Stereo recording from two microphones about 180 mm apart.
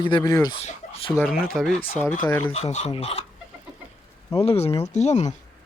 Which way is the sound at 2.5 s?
35° left (ahead or behind).